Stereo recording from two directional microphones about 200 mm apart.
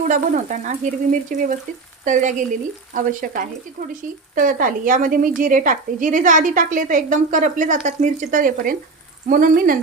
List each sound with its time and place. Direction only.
0.0 s a woman's voice: 40° right (ahead or behind)